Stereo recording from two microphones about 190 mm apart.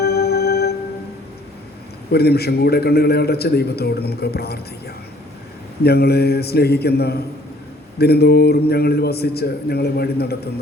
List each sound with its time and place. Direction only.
0.0 s music: 55° left (ahead or behind)
2.1 s a man's voice: 55° left (ahead or behind)
5.8 s a man's voice: 55° left (ahead or behind)